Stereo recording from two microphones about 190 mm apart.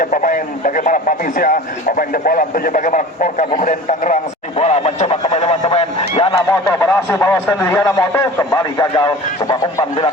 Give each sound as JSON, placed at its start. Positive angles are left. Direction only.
{"t": 0.0, "sound": "speech", "side_deg": 45}
{"t": 3.6, "sound": "a sound", "side_deg": 40}
{"t": 6.3, "sound": "speech", "side_deg": 15}